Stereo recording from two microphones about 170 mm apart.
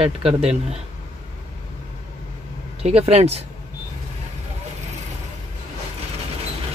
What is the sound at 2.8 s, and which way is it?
Speech, 35° right (ahead or behind).